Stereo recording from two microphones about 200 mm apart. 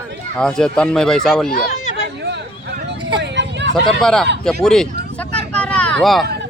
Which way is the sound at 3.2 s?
60° right (ahead or behind).